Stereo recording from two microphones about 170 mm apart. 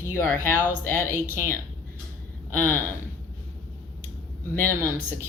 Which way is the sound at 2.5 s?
10° left (ahead or behind).